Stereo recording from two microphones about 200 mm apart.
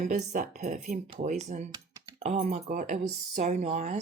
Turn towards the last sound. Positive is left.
turn(degrees=-35)  # may be behind; listen again after turning